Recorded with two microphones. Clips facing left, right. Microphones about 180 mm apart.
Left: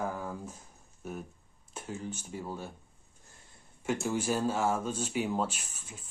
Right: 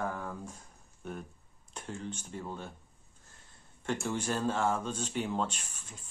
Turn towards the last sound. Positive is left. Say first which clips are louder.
# left 2 dB
turn(degrees=10)  # may be behind; listen again after turning